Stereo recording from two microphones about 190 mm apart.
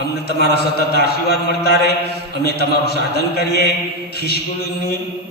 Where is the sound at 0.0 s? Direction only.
55° left (ahead or behind).